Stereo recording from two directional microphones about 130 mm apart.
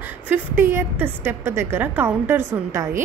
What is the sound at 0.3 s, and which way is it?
A woman's voice, 20° right (ahead or behind).